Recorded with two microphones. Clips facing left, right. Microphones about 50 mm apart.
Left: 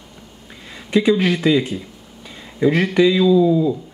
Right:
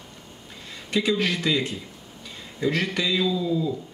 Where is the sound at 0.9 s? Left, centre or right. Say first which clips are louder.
Left 8 dB; centre.